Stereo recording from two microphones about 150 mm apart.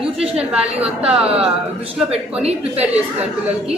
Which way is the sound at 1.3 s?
40° right (ahead or behind).